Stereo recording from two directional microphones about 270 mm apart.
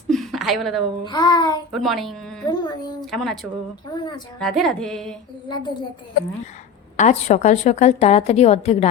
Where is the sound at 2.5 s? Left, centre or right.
Centre.